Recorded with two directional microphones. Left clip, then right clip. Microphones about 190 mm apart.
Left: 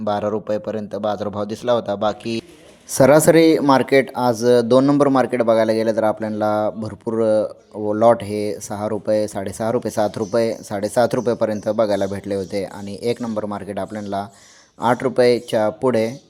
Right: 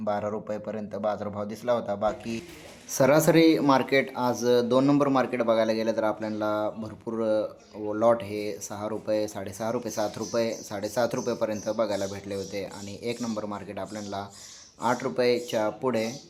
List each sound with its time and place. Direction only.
0.0 s speech: 30° left (ahead or behind)